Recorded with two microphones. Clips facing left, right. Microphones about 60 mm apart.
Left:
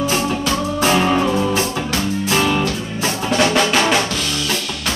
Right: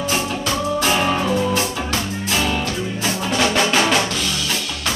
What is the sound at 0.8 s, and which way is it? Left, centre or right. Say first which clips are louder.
Music: left 5 dB; centre.